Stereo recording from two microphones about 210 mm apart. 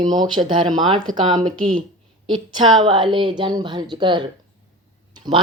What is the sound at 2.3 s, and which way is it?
A woman's voice, 20° right (ahead or behind).